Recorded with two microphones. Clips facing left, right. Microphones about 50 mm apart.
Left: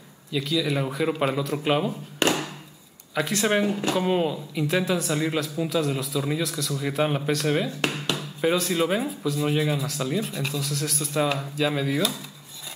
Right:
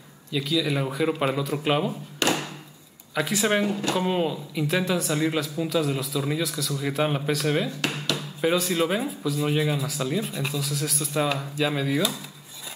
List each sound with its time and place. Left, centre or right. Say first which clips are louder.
0.3 s speech: even; centre
2.2 s a sound: left 1 dB; left
3.2 s speech: even; centre